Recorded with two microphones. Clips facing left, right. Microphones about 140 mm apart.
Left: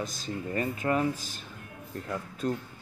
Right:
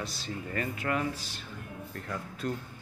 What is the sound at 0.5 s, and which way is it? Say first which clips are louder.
Speech: left 4 dB; 30° left (ahead or behind).